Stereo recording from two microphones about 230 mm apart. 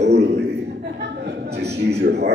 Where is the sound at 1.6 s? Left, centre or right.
Right.